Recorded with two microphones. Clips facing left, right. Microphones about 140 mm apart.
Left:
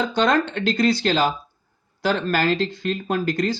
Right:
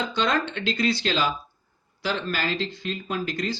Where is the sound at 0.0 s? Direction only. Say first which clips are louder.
Left 5 dB; 50° left (ahead or behind).